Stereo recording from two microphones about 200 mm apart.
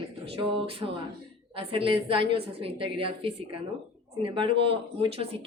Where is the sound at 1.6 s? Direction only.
25° right (ahead or behind).